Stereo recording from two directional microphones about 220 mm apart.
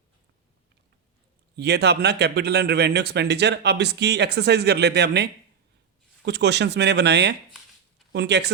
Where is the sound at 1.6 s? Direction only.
50° right (ahead or behind).